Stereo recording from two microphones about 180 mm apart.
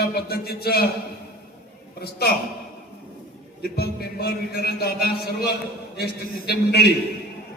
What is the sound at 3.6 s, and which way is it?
A man's voice, 60° left (ahead or behind).